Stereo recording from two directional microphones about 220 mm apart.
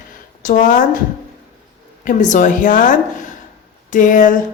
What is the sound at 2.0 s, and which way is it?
A woman's voice, 35° left (ahead or behind).